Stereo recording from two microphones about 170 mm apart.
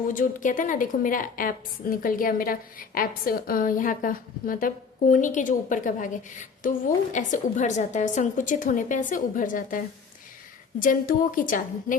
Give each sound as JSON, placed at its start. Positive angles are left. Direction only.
{"t": 0.1, "sound": "a woman's voice", "side_deg": 50}